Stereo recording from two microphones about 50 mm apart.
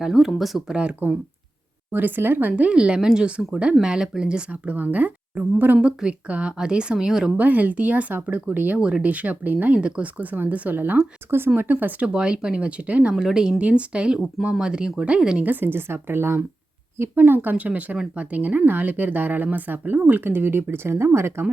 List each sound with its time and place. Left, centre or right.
0.0 s speech: centre
0.7 s speech: right
1.9 s a woman's voice: right
2.5 s speech: right
4.7 s a woman's voice: right
5.8 s speech: centre
7.3 s a woman's voice: right
11.3 s a woman's voice: right
12.0 s speech: centre
13.1 s speech: centre
13.6 s speech: right
15.6 s speech: right
17.2 s a woman's voice: right